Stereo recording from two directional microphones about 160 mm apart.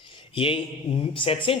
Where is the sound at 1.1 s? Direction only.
35° left (ahead or behind).